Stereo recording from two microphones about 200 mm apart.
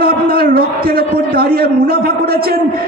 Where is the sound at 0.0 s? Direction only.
50° right (ahead or behind).